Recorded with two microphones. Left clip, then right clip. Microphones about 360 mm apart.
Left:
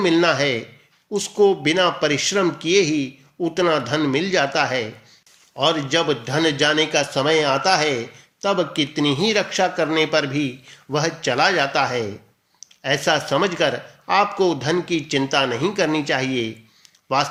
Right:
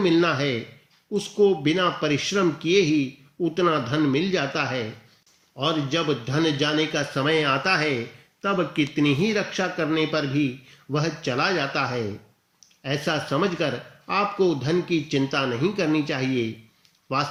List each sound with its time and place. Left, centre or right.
0.0 s a man's voice: centre